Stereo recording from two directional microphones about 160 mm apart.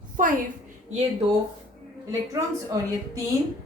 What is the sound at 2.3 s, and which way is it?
Speech, 20° right (ahead or behind).